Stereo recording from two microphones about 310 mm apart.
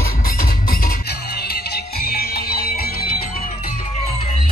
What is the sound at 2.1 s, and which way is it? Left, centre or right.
Music, left.